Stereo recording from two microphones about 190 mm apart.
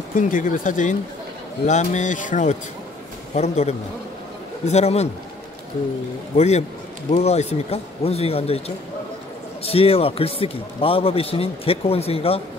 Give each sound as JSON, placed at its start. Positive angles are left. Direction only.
{"t": 0.1, "sound": "a man's voice", "side_deg": 45}
{"t": 6.3, "sound": "a man's voice", "side_deg": 35}